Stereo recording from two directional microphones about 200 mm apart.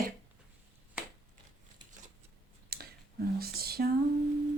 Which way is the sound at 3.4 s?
50° right (ahead or behind).